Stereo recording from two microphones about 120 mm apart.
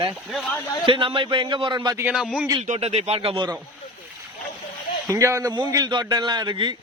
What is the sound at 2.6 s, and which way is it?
Speech, 70° right (ahead or behind).